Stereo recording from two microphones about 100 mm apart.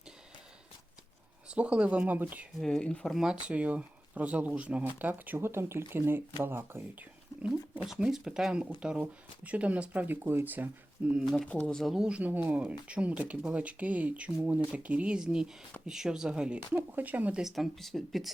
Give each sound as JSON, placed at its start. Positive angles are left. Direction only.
{"t": 1.5, "sound": "speech", "side_deg": -10}
{"t": 2.6, "sound": "speech", "side_deg": 5}
{"t": 3.4, "sound": "speech", "side_deg": -15}
{"t": 7.4, "sound": "speech", "side_deg": -10}
{"t": 11.4, "sound": "speech", "side_deg": 15}
{"t": 11.9, "sound": "speech", "side_deg": -10}
{"t": 17.4, "sound": "speech", "side_deg": 0}